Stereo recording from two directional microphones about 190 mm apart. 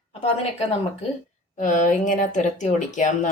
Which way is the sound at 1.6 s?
45° left (ahead or behind).